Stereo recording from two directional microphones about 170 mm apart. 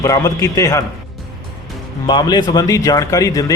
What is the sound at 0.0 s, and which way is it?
Speech, 20° left (ahead or behind).